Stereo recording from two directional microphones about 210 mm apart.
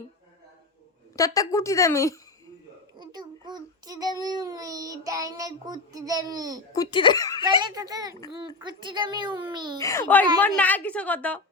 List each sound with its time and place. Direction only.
1.1 s a woman's voice: 15° left (ahead or behind)
3.0 s a child's voice: 20° right (ahead or behind)
6.7 s speech: 20° left (ahead or behind)
7.4 s a child's voice: 20° right (ahead or behind)
9.8 s a woman's voice: 10° left (ahead or behind)